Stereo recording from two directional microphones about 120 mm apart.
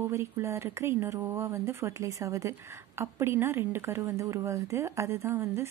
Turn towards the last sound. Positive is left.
turn(degrees=-20)  # may be behind; listen again after turning